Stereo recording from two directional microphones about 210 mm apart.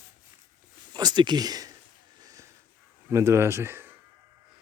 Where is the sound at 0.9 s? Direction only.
20° right (ahead or behind).